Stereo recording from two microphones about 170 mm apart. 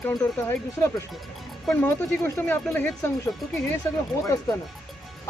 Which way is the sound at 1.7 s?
10° left (ahead or behind).